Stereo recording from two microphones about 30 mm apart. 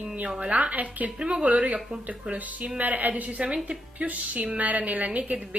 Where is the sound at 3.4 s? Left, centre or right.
Right.